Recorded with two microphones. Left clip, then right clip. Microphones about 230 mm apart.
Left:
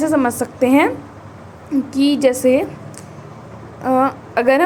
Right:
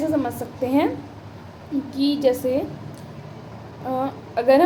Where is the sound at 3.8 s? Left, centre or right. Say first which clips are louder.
Left 10 dB; left.